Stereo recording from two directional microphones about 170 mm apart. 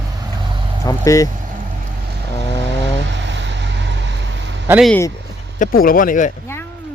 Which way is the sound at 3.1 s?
90° right.